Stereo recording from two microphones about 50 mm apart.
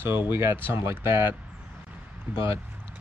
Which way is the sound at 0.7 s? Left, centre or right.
Right.